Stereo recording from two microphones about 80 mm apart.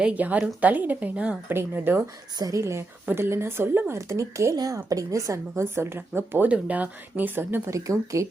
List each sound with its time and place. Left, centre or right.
0.0 s a woman's voice: centre
1.5 s a woman's voice: right
2.4 s a woman's voice: right
4.5 s a woman's voice: right
7.7 s a woman's voice: right